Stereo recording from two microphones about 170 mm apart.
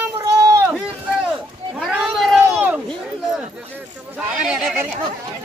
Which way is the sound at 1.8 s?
Centre (ahead or behind).